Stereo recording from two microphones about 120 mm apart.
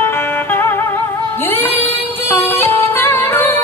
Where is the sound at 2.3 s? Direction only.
20° left (ahead or behind).